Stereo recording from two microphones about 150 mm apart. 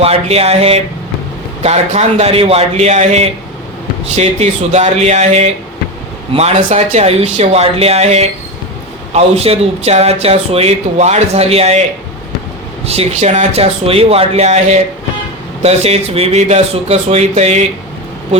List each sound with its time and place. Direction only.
0.0 s speech: 40° right (ahead or behind)
12.8 s speech: 45° right (ahead or behind)